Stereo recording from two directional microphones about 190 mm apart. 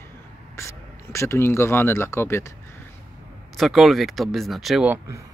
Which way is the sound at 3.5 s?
Centre (ahead or behind).